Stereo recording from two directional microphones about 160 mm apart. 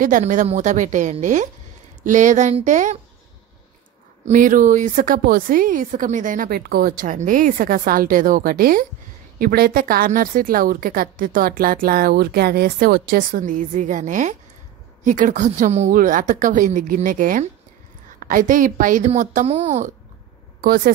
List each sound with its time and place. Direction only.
0.0 s a woman's voice: 55° right (ahead or behind)
4.2 s a woman's voice: 55° right (ahead or behind)
20.6 s a woman's voice: 65° right (ahead or behind)